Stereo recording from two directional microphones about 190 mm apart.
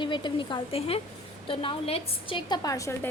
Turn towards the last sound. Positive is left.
turn(degrees=15)  # may be behind; listen again after turning